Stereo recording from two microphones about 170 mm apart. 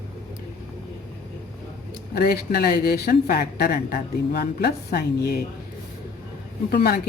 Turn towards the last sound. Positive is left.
turn(degrees=70)  # may be behind; listen again after turning